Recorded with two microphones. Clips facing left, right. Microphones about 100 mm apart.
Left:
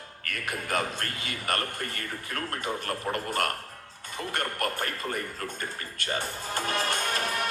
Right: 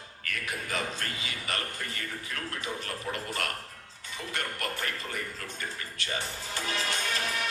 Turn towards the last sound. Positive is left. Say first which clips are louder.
# left 3 dB
turn(degrees=50)  # may be behind; listen again after turning